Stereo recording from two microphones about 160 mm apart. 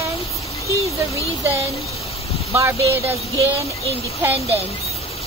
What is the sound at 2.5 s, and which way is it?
Speech, 15° right (ahead or behind).